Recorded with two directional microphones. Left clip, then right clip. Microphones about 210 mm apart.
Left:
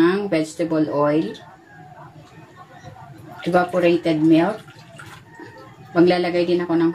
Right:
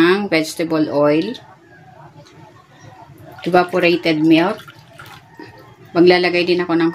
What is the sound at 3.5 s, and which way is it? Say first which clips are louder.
Speech: right 3 dB; 50° right (ahead or behind).